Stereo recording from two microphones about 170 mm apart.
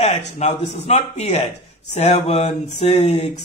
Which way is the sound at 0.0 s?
40° left (ahead or behind).